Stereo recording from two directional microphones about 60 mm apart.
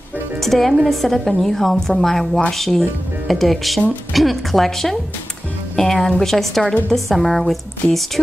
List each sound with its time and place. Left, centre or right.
0.4 s a woman's voice: centre